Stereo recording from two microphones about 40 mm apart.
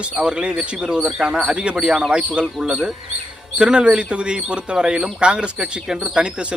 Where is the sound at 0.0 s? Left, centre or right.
Right.